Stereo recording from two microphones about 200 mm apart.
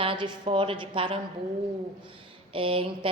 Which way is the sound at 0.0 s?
25° right (ahead or behind).